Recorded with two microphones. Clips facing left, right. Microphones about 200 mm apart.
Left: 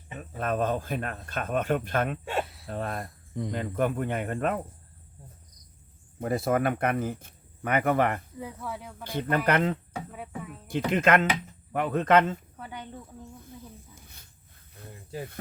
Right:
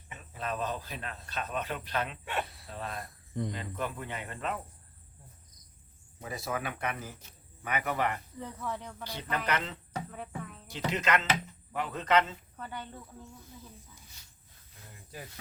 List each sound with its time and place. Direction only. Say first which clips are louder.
0.2 s speech: left 7 dB; 50° left (ahead or behind)
2.4 s a sound: left 4 dB; centre (ahead or behind)
2.6 s speech: left 7 dB; 50° left (ahead or behind)
6.1 s speech: left 10 dB; 55° left (ahead or behind)
8.4 s speech: left 1 dB; 10° left (ahead or behind)
9.3 s speech: left 8 dB; 55° left (ahead or behind)
10.1 s a sound: left 2 dB; 5° left (ahead or behind)
10.7 s speech: left 7 dB; 55° left (ahead or behind)
12.5 s speech: left 1 dB; 10° left (ahead or behind)
13.9 s snake: left 5 dB; 55° left (ahead or behind)